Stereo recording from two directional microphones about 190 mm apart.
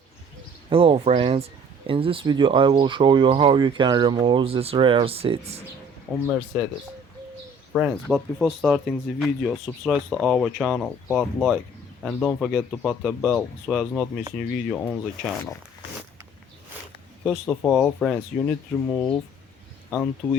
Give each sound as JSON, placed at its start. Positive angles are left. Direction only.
{"t": 0.7, "sound": "speech", "side_deg": -30}
{"t": 6.1, "sound": "speech", "side_deg": 5}
{"t": 7.7, "sound": "speech", "side_deg": 0}
{"t": 17.2, "sound": "speech", "side_deg": 5}